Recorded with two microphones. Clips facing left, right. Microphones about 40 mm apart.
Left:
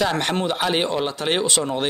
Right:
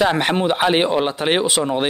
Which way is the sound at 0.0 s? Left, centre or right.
Centre.